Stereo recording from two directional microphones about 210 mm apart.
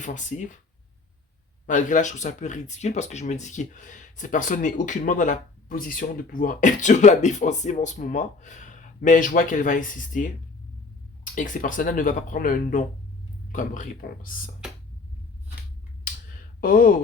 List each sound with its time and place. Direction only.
0.0 s speech: 35° left (ahead or behind)
1.6 s speech: 35° left (ahead or behind)
16.6 s speech: 40° left (ahead or behind)